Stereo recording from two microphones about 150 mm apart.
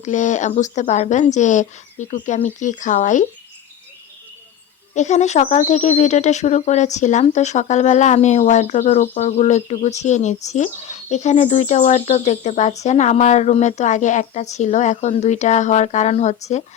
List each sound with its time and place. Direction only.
0.0 s speech: 55° left (ahead or behind)
4.9 s speech: 50° left (ahead or behind)